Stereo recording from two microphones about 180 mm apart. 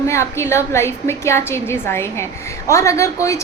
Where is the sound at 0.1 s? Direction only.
15° left (ahead or behind).